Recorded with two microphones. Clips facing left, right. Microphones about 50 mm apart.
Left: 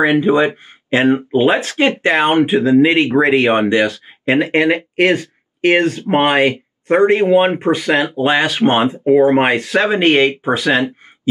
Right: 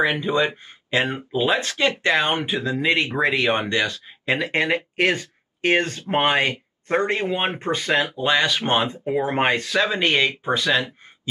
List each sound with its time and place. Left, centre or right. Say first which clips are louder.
0.0 s speech: left 8 dB; left